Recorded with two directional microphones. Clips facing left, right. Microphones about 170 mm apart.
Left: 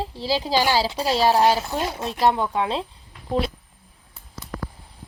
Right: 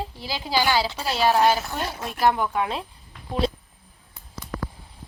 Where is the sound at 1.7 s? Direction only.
15° left (ahead or behind).